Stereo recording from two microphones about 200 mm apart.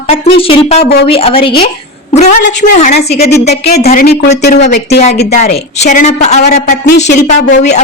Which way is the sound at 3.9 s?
50° left (ahead or behind).